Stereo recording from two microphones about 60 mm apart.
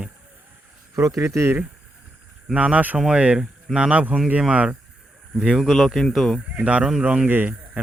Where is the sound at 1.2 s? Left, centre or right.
Right.